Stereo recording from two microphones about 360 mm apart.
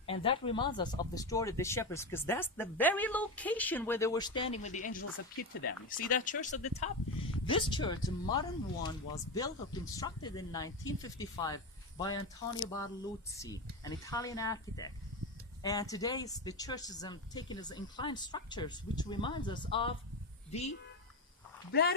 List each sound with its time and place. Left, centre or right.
0.0 s speech: centre
13.3 s speech: centre
21.7 s speech: left